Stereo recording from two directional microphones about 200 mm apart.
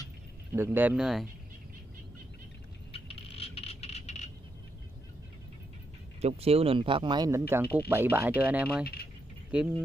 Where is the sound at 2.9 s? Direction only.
30° left (ahead or behind).